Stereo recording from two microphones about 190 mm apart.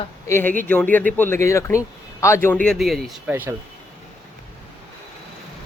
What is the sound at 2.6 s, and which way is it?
Speech, centre (ahead or behind).